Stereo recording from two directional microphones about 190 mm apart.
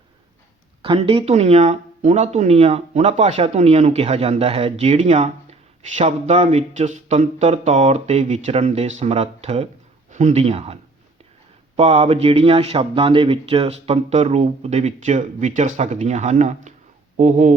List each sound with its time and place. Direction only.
0.8 s speech: 30° right (ahead or behind)
11.8 s speech: 30° right (ahead or behind)